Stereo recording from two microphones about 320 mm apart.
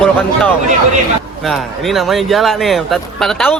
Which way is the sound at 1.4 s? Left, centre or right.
Centre.